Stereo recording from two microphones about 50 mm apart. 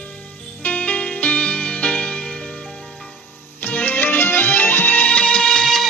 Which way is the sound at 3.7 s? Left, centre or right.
Left.